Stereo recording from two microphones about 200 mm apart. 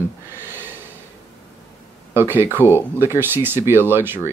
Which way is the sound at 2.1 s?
10° right (ahead or behind).